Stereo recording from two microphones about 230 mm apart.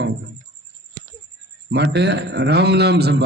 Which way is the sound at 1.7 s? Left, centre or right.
Right.